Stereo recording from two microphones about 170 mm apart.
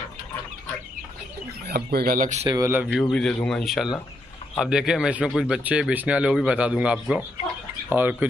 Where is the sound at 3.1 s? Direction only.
5° left (ahead or behind).